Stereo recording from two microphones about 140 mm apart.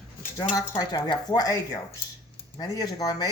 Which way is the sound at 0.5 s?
25° left (ahead or behind).